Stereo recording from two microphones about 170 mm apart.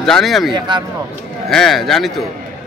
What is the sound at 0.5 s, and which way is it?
Speech, 25° right (ahead or behind).